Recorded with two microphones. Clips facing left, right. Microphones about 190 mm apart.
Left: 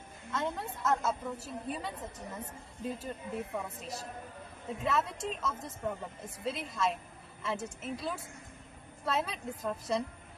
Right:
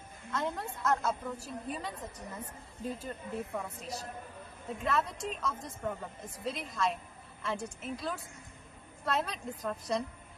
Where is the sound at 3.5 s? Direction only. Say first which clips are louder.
Even; centre (ahead or behind).